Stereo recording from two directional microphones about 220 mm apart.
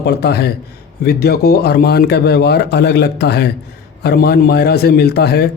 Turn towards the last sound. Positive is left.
turn(degrees=45)  # may be behind; listen again after turning